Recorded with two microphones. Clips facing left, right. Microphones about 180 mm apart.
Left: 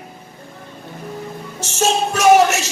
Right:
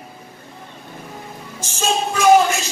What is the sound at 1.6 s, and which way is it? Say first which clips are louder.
Music: left 3 dB; 70° left (ahead or behind).